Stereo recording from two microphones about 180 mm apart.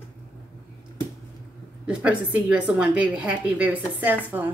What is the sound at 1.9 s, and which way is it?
A woman's voice, 5° right (ahead or behind).